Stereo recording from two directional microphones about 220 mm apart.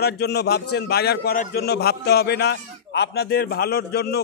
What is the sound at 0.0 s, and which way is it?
A man's voice, 45° left (ahead or behind).